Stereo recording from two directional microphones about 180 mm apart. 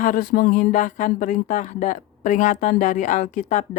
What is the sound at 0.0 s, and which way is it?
Speech, 50° left (ahead or behind).